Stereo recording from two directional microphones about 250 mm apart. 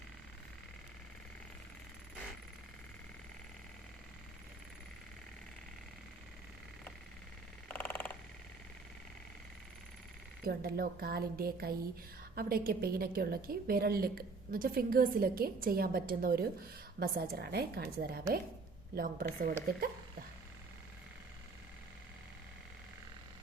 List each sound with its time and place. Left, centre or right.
7.7 s frog: centre
10.4 s a woman's voice: right